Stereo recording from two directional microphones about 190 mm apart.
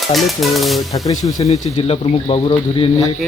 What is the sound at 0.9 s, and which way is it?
Speech, 20° left (ahead or behind).